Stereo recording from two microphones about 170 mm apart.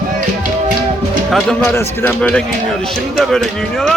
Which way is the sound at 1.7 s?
15° left (ahead or behind).